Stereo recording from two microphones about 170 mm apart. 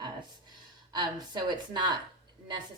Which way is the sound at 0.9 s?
25° right (ahead or behind).